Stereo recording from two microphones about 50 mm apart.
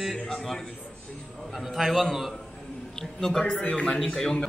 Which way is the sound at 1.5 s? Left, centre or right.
Centre.